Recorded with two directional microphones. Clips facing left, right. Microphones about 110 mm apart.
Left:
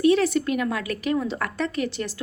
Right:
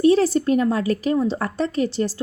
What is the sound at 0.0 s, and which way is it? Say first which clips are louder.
A woman's voice: right 3 dB; 35° right (ahead or behind).